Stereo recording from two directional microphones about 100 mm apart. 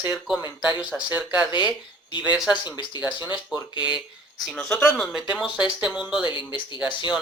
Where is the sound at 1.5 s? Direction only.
50° left (ahead or behind).